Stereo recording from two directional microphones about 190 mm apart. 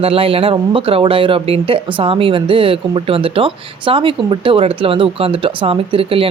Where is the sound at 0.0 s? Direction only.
30° right (ahead or behind).